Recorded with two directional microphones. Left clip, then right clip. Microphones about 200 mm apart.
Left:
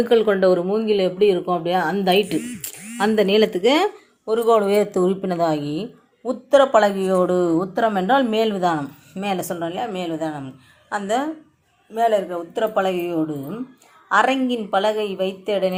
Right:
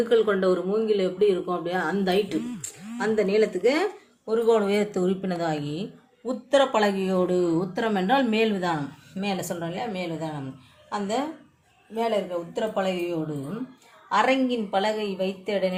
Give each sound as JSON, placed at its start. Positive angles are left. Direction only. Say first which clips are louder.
{"t": 0.0, "sound": "speech", "louder": "left 5 dB", "side_deg": 35}
{"t": 4.3, "sound": "a woman's voice", "louder": "left 5 dB", "side_deg": 25}